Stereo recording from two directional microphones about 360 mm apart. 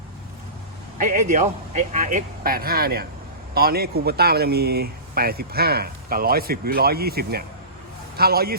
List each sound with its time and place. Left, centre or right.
0.9 s a man's voice: right